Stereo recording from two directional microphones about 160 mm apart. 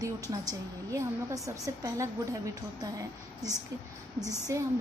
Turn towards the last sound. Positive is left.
turn(degrees=-20)  # may be behind; listen again after turning